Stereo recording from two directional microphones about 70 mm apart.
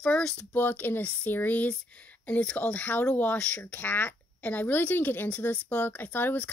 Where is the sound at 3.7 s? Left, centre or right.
Left.